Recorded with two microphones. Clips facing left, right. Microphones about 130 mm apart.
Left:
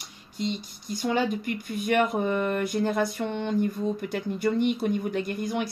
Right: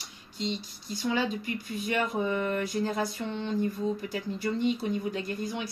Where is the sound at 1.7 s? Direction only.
60° left (ahead or behind).